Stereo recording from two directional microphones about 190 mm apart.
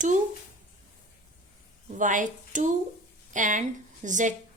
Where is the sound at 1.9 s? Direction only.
40° right (ahead or behind).